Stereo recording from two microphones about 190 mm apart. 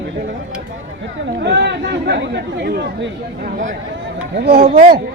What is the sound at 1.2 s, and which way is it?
Speech, 60° right (ahead or behind).